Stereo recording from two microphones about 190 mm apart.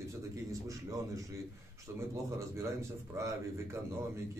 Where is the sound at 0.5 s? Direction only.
15° right (ahead or behind).